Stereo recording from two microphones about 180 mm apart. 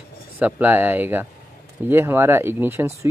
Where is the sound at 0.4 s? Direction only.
10° right (ahead or behind).